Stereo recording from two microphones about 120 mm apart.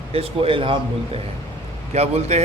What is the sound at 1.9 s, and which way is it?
Speech, 65° right (ahead or behind).